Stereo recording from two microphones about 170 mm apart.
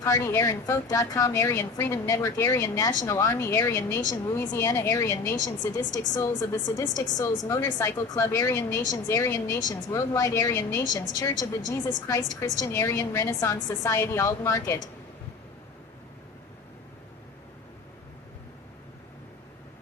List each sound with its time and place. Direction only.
0.0 s a woman's voice: 15° left (ahead or behind)